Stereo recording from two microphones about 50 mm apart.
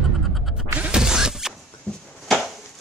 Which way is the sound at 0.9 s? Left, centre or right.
Centre.